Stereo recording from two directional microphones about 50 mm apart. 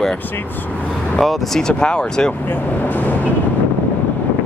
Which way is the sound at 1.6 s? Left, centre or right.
Centre.